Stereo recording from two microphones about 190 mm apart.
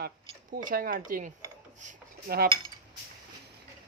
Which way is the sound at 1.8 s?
45° right (ahead or behind).